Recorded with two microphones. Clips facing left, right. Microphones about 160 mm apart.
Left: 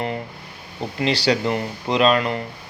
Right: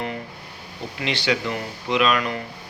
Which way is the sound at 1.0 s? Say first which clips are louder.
Left 4 dB; 35° left (ahead or behind).